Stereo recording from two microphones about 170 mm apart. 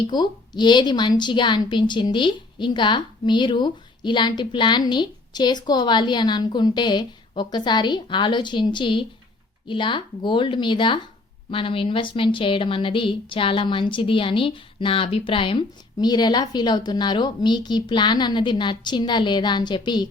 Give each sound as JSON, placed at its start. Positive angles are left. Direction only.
{"t": 0.1, "sound": "a woman's voice", "side_deg": 25}